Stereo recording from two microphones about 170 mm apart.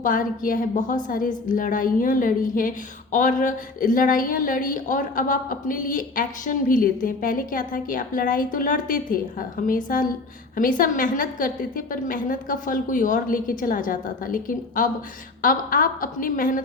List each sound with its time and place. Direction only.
0.0 s a woman's voice: 50° left (ahead or behind)